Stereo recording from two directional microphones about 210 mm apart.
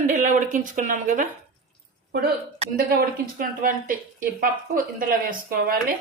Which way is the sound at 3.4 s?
40° right (ahead or behind).